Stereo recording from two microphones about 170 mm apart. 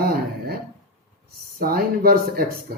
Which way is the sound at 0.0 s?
60° right (ahead or behind).